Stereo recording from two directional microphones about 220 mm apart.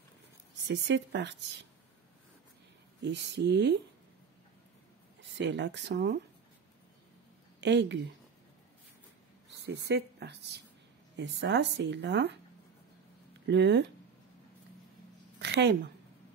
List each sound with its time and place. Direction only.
0.7 s speech: 55° right (ahead or behind)
3.0 s speech: 50° right (ahead or behind)
5.4 s speech: 50° right (ahead or behind)
7.6 s speech: 50° right (ahead or behind)
9.7 s speech: 50° right (ahead or behind)
13.5 s speech: 50° right (ahead or behind)
15.3 s a sound: 50° right (ahead or behind)